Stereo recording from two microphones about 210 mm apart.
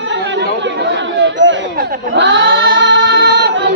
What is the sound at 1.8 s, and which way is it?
Music, 55° right (ahead or behind).